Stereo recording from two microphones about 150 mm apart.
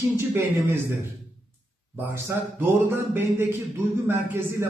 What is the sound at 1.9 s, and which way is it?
Speech, 15° right (ahead or behind).